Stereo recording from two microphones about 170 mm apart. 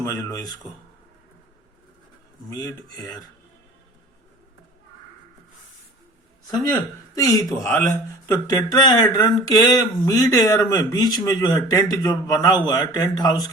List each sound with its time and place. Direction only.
0.0 s a man's voice: 20° left (ahead or behind)
2.5 s a man's voice: 20° left (ahead or behind)
6.5 s a man's voice: 20° left (ahead or behind)